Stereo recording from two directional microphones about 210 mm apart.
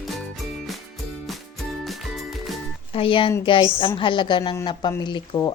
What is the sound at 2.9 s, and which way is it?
Speech, 25° left (ahead or behind).